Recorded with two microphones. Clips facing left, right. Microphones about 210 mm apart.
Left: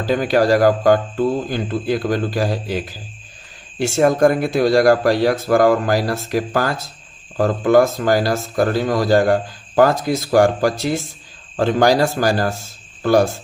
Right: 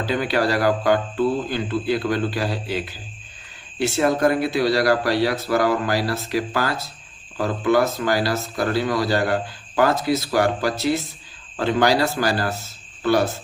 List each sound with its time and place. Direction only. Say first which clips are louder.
0.0 s speech: left 5 dB; 45° left (ahead or behind)